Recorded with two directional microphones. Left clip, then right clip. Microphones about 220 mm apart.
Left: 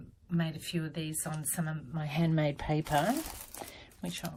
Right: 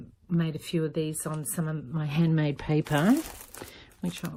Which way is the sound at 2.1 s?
50° right (ahead or behind).